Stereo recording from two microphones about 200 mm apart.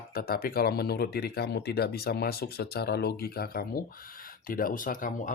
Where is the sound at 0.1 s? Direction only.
50° left (ahead or behind).